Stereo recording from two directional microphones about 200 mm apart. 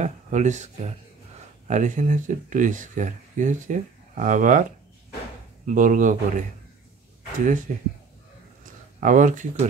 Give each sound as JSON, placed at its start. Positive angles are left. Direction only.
{"t": 0.0, "sound": "speech", "side_deg": -35}
{"t": 1.7, "sound": "speech", "side_deg": -40}
{"t": 7.4, "sound": "speech", "side_deg": -40}